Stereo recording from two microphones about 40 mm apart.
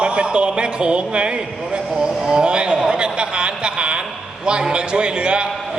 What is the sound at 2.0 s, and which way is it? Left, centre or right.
A man's voice, right.